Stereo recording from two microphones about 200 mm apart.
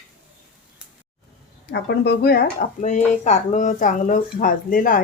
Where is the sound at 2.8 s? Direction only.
35° left (ahead or behind).